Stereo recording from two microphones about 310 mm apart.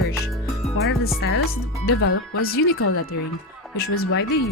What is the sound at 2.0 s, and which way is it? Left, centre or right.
Speech, left.